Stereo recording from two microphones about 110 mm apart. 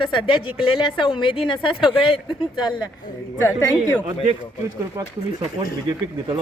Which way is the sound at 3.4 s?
25° left (ahead or behind).